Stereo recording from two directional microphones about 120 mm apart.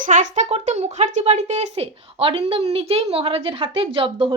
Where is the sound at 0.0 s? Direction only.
90° right.